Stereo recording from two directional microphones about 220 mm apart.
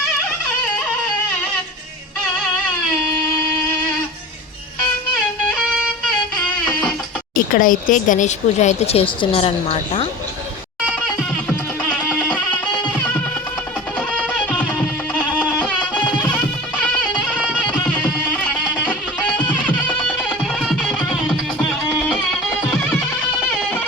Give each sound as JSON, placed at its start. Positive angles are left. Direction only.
{"t": 7.3, "sound": "speech", "side_deg": 40}
{"t": 10.8, "sound": "music", "side_deg": 5}
{"t": 14.3, "sound": "music", "side_deg": 5}
{"t": 20.4, "sound": "music", "side_deg": 0}